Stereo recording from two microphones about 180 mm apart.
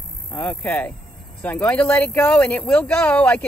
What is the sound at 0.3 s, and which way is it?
Speech, 5° left (ahead or behind).